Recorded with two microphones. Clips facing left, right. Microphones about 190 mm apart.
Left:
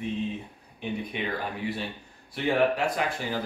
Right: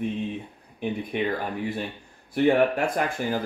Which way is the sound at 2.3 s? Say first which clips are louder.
Right 4 dB; 50° right (ahead or behind).